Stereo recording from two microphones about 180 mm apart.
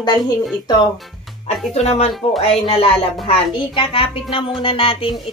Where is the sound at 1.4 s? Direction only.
35° left (ahead or behind).